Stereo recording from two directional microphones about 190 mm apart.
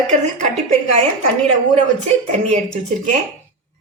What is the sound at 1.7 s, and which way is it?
Speech, 35° right (ahead or behind).